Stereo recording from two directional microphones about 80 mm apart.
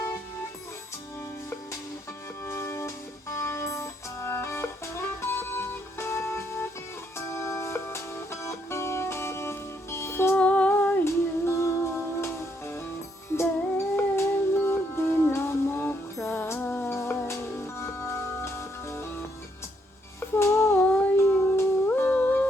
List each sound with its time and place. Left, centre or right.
2.5 s music: left
10.3 s music: centre
16.6 s music: left
16.9 s music: left
20.3 s music: left
20.7 s humming: centre
21.2 s music: left